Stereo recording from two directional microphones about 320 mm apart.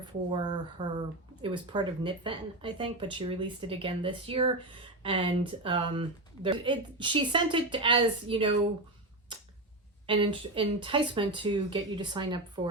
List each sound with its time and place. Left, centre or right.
0.0 s speech: centre
9.3 s a sound: centre
10.1 s speech: centre